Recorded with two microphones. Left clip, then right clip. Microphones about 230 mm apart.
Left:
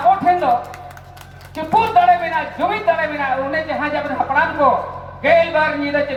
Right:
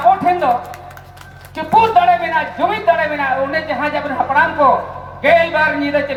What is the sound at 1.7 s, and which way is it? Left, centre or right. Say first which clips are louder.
Speech: right 2 dB; right.